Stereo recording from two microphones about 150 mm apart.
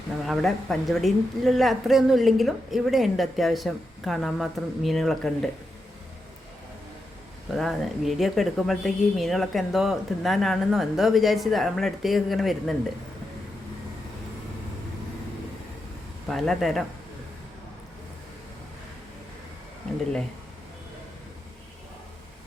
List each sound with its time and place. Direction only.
0.3 s a woman's voice: centre (ahead or behind)
7.5 s a woman's voice: centre (ahead or behind)
16.3 s a woman's voice: centre (ahead or behind)